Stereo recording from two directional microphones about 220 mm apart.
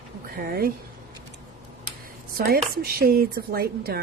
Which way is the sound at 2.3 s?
45° right (ahead or behind).